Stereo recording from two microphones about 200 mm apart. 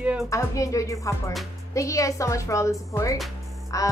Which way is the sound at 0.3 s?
15° left (ahead or behind).